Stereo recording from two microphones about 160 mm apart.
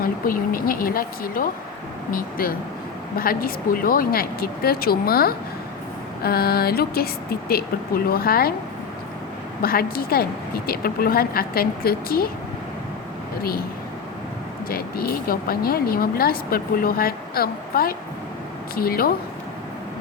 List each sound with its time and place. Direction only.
0.0 s speech: 65° left (ahead or behind)
9.6 s speech: 70° left (ahead or behind)
13.4 s speech: 70° left (ahead or behind)
14.7 s speech: 70° left (ahead or behind)